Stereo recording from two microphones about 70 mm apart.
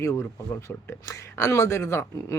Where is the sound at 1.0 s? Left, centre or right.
Left.